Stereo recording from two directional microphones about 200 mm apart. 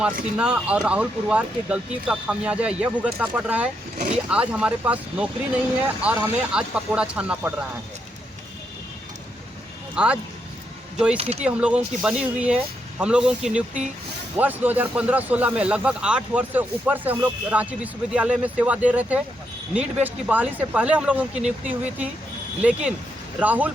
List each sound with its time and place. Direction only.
0.3 s speech: 5° right (ahead or behind)
3.9 s speech: 35° right (ahead or behind)
4.3 s speech: 5° right (ahead or behind)
9.9 s speech: 5° right (ahead or behind)
11.2 s speech: 30° right (ahead or behind)
11.4 s speech: 5° right (ahead or behind)